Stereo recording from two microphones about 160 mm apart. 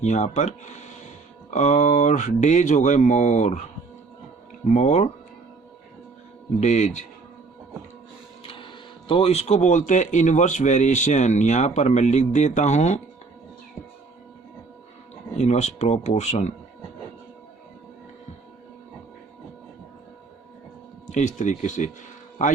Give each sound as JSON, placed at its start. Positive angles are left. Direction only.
{"t": 0.0, "sound": "speech", "side_deg": 45}
{"t": 4.6, "sound": "speech", "side_deg": 45}
{"t": 6.6, "sound": "speech", "side_deg": 45}
{"t": 8.4, "sound": "speech", "side_deg": 35}
{"t": 15.4, "sound": "speech", "side_deg": 45}
{"t": 21.1, "sound": "speech", "side_deg": 50}